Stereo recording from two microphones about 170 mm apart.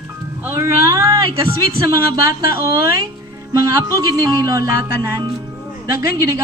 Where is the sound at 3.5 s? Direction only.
20° right (ahead or behind).